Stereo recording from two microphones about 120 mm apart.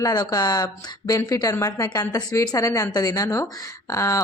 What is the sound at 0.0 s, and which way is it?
Speech, 30° left (ahead or behind).